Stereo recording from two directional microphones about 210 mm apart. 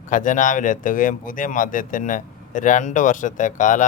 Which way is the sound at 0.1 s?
40° left (ahead or behind).